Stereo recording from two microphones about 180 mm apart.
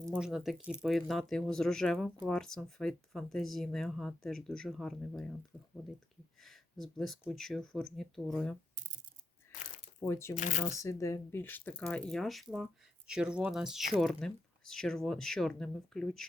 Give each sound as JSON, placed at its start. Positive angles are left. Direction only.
{"t": 0.1, "sound": "speech", "side_deg": -5}
{"t": 6.4, "sound": "speech", "side_deg": 0}
{"t": 10.0, "sound": "speech", "side_deg": 15}
{"t": 10.3, "sound": "speech", "side_deg": 40}
{"t": 10.7, "sound": "speech", "side_deg": 15}